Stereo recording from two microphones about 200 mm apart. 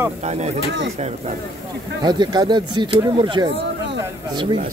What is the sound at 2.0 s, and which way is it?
Speech, 20° right (ahead or behind).